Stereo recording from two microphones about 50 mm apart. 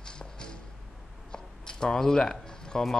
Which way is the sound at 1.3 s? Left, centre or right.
Centre.